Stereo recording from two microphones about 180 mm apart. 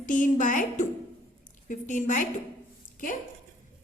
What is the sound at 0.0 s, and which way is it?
A woman's voice, 45° left (ahead or behind).